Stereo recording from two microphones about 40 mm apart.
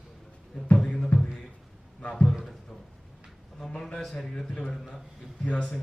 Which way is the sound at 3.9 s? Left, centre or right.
Centre.